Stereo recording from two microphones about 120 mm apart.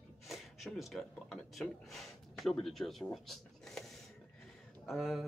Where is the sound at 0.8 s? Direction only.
Centre (ahead or behind).